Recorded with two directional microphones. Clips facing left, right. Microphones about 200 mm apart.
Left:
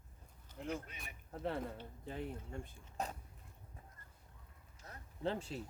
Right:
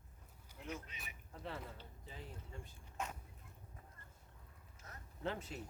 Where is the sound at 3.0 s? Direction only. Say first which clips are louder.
Left 3 dB; 35° left (ahead or behind).